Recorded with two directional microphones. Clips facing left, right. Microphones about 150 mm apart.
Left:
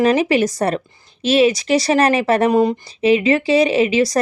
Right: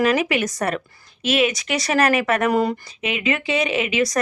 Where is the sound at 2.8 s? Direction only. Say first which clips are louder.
Left 9 dB; 35° left (ahead or behind).